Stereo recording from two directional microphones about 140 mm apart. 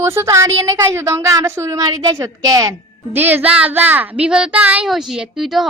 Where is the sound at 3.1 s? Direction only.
15° right (ahead or behind).